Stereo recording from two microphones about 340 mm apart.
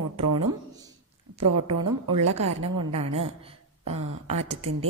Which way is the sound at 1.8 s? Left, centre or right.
Right.